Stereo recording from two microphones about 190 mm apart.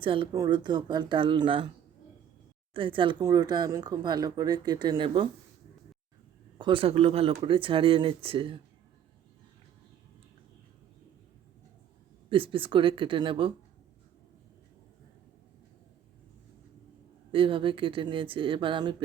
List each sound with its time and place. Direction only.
0.0 s speech: 25° right (ahead or behind)
2.7 s speech: 25° right (ahead or behind)
6.6 s speech: 25° right (ahead or behind)
12.3 s speech: 30° right (ahead or behind)
17.3 s speech: 25° right (ahead or behind)